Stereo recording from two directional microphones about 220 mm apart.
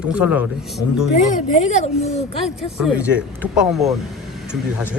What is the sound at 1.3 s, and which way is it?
Speech, 30° left (ahead or behind).